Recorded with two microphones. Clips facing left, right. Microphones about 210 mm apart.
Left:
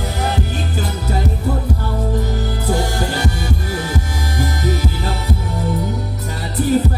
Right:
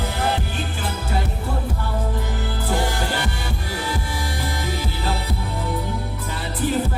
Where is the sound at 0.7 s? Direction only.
40° left (ahead or behind).